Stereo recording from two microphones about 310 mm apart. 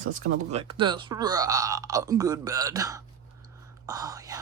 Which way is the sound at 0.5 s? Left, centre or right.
Centre.